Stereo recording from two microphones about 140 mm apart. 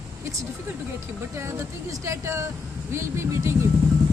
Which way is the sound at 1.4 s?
20° right (ahead or behind).